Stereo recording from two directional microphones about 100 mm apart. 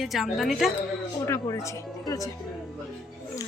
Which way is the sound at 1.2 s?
30° left (ahead or behind).